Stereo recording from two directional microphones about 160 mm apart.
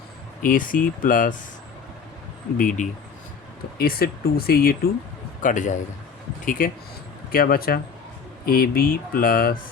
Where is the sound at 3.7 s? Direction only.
70° left (ahead or behind).